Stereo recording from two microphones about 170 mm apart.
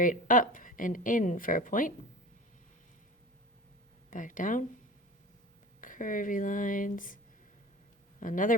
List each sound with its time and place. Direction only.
0.0 s a woman's voice: 50° left (ahead or behind)
4.1 s a woman's voice: 50° left (ahead or behind)
5.8 s a woman's voice: 50° left (ahead or behind)
8.2 s a woman's voice: 50° left (ahead or behind)